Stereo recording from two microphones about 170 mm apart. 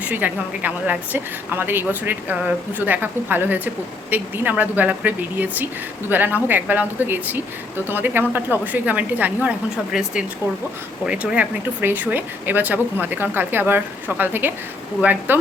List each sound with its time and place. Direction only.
0.0 s speech: 10° right (ahead or behind)